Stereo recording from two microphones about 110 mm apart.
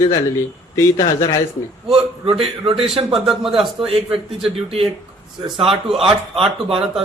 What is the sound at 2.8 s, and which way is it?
Speech, 5° right (ahead or behind).